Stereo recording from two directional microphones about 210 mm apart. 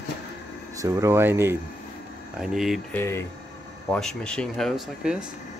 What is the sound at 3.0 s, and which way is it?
Speech, 10° left (ahead or behind).